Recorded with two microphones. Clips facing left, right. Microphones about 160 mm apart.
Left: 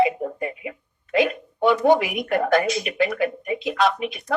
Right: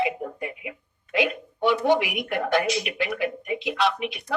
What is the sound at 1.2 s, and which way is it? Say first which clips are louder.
Speech: left 3 dB; 45° left (ahead or behind).